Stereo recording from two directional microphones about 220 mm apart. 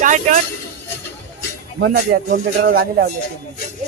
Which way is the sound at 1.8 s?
50° right (ahead or behind).